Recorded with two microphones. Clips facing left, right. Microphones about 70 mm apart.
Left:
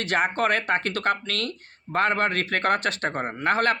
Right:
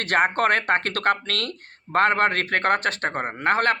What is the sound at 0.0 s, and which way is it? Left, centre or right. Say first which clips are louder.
Speech: right 3 dB; right.